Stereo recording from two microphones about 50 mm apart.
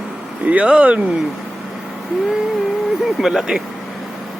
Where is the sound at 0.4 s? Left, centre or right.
Right.